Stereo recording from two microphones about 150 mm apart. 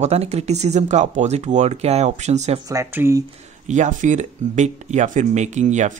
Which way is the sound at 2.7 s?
15° right (ahead or behind).